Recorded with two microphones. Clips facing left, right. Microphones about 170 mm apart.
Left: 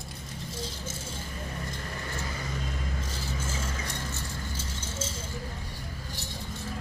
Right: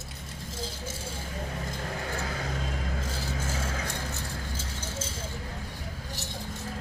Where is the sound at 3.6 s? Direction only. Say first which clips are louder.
Right 2 dB; 60° right (ahead or behind).